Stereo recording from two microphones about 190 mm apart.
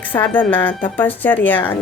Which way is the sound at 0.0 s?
10° left (ahead or behind).